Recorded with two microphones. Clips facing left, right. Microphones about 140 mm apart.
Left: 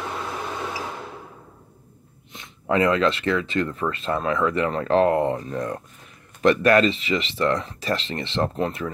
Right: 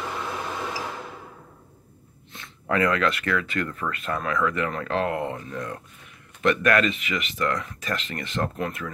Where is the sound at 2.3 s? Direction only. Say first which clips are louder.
Left 3 dB; 20° left (ahead or behind).